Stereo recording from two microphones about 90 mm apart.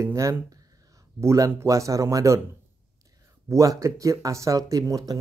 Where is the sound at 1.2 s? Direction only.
35° right (ahead or behind).